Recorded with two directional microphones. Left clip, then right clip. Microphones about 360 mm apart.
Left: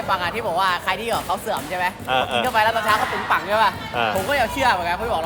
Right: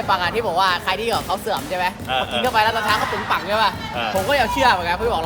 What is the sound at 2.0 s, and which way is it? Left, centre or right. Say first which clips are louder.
Speech: left 1 dB; centre.